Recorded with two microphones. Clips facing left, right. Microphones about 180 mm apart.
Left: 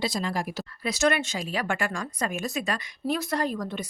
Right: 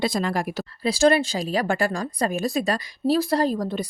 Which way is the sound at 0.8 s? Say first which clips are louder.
Right 6 dB; 30° right (ahead or behind).